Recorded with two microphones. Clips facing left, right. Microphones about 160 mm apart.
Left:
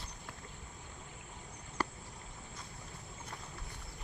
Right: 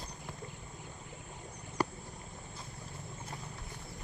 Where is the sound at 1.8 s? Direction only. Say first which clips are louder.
Right 4 dB; 10° right (ahead or behind).